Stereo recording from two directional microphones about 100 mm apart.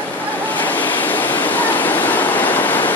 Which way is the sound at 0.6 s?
20° left (ahead or behind).